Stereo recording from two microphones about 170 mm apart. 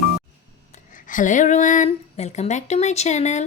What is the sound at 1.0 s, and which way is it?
Speech, 50° left (ahead or behind).